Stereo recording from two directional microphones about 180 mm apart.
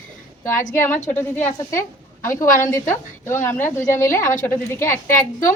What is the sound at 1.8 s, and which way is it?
Speech, 15° left (ahead or behind).